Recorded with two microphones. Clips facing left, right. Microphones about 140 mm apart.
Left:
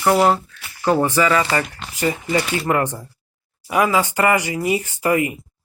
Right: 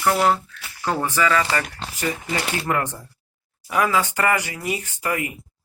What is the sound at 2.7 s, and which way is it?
Speech, 15° left (ahead or behind).